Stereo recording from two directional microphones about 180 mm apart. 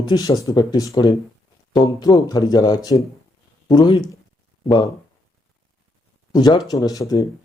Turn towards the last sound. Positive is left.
turn(degrees=20)  # may be behind; listen again after turning